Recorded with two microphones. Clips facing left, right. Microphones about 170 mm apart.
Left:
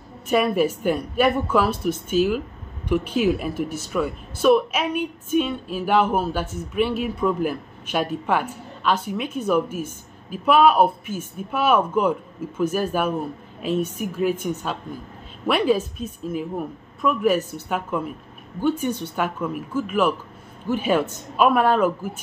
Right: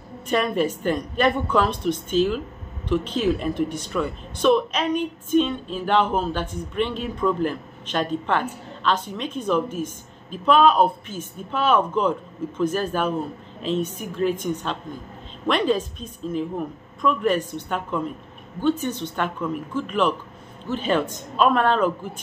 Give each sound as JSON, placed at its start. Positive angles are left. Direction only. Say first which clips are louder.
{"t": 0.3, "sound": "speech", "louder": "left 2 dB", "side_deg": 10}